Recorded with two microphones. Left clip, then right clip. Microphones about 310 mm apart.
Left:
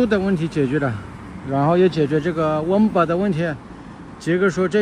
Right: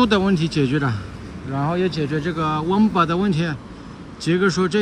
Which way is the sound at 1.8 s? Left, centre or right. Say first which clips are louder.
Left 5 dB; centre.